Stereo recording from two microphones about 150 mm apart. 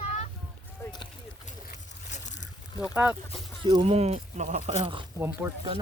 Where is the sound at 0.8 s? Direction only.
15° left (ahead or behind).